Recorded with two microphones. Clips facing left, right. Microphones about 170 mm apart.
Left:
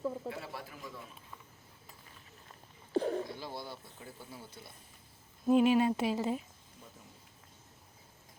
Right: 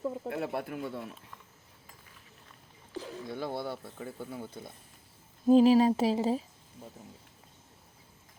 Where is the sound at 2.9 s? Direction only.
60° left (ahead or behind).